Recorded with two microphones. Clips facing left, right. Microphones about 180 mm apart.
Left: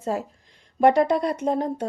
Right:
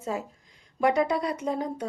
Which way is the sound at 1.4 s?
60° left (ahead or behind).